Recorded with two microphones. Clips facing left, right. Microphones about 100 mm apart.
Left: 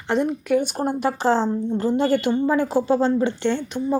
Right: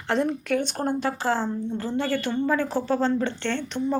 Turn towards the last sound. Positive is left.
turn(degrees=10)  # may be behind; listen again after turning